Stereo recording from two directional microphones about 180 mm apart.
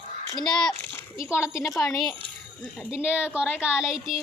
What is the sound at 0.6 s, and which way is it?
Speech, 5° left (ahead or behind).